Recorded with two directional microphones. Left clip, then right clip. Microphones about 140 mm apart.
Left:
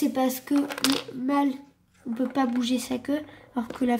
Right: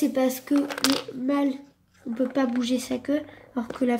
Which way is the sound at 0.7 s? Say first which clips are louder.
Right 1 dB; 25° right (ahead or behind).